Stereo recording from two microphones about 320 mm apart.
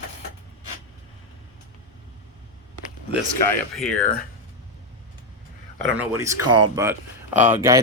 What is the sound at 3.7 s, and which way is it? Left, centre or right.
Speech, centre.